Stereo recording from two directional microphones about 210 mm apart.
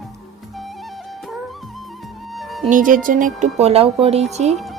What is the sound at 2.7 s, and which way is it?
Speech, 40° right (ahead or behind).